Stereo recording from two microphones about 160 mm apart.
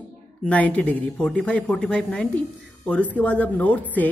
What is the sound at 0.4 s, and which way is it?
A woman's voice, 10° left (ahead or behind).